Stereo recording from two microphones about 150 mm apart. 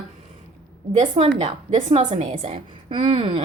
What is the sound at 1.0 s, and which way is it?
A woman's voice, 45° right (ahead or behind).